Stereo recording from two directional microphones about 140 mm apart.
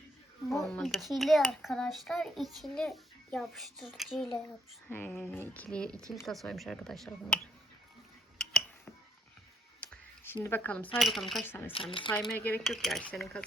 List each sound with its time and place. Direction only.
0.6 s a child's voice: centre (ahead or behind)
4.4 s a child's voice: 15° left (ahead or behind)
8.4 s a sound: 5° left (ahead or behind)
9.8 s a sound: 15° left (ahead or behind)
10.9 s a child's voice: centre (ahead or behind)
11.4 s speech: 15° left (ahead or behind)
11.7 s speech: 40° left (ahead or behind)
12.4 s speech: 10° left (ahead or behind)
12.6 s a child's voice: centre (ahead or behind)